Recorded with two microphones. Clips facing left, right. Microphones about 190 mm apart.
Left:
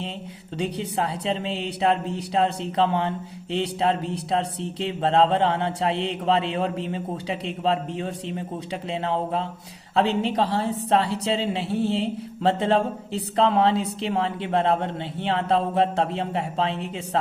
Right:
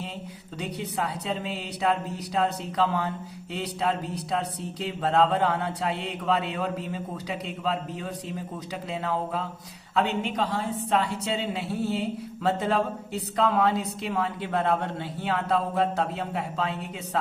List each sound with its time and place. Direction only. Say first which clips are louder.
0.6 s a woman's voice: left 4 dB; 30° left (ahead or behind)